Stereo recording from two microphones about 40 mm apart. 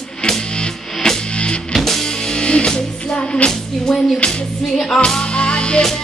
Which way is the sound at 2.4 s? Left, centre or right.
Left.